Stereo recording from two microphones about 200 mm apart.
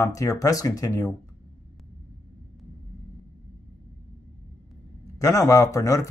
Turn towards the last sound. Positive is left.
turn(degrees=15)  # may be behind; listen again after turning